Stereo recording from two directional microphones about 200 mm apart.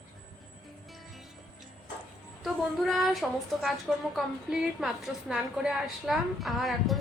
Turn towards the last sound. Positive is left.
turn(degrees=0)  # may be behind; listen again after turning